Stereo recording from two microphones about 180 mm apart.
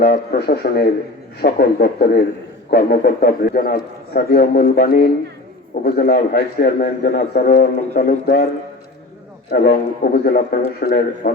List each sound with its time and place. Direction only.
0.0 s a man's voice: 55° left (ahead or behind)
9.5 s a man's voice: 60° left (ahead or behind)